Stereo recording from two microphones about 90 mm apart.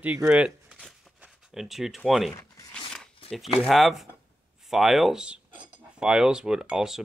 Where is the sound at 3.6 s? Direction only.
Centre (ahead or behind).